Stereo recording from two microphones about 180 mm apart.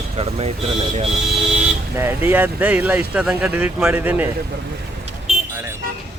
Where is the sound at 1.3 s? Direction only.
Centre (ahead or behind).